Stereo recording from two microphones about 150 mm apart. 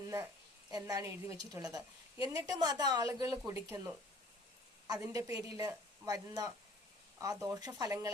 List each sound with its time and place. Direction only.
0.0 s a sound: 20° right (ahead or behind)
0.7 s a woman's voice: 20° right (ahead or behind)
4.9 s a woman's voice: 20° right (ahead or behind)